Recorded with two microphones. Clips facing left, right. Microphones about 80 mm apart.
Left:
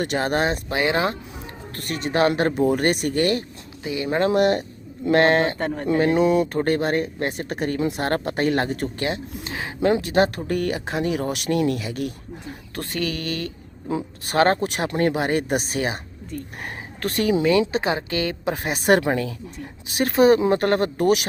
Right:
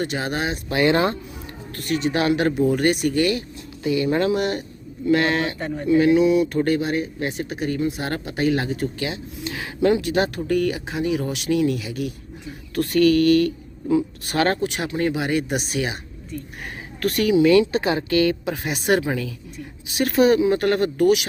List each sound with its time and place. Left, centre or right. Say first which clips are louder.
0.0 s speech: left 3 dB; left
0.7 s speech: right 7 dB; centre
1.7 s speech: right 2 dB; left
3.8 s speech: right 4 dB; centre
4.3 s speech: left 3 dB; left
5.5 s speech: right 2 dB; left
6.0 s speech: right 2 dB; left
8.0 s speech: left 1 dB; left
9.5 s speech: right 1 dB; left
12.7 s speech: right 11 dB; left
14.8 s speech: left 3 dB; left
18.5 s speech: left 2 dB; left
18.9 s speech: left 2 dB; left
20.0 s speech: left 1 dB; left